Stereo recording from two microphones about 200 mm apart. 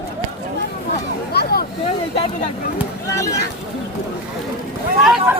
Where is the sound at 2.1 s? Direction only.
35° left (ahead or behind).